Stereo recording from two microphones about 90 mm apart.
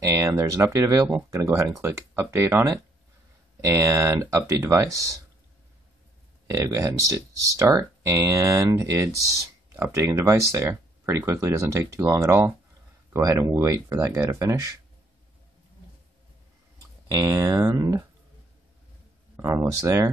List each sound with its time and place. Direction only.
0.0 s speech: 35° right (ahead or behind)
6.5 s speech: 40° right (ahead or behind)
17.1 s speech: 40° right (ahead or behind)
19.6 s speech: 35° right (ahead or behind)